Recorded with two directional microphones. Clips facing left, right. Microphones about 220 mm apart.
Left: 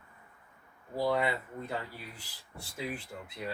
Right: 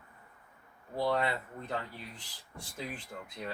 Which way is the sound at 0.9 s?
10° left (ahead or behind).